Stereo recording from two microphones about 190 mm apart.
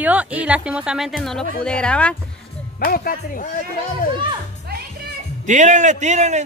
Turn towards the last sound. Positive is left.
turn(degrees=-35)  # may be behind; listen again after turning